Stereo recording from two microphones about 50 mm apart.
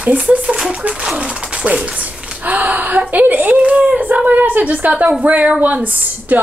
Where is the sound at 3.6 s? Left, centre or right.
Right.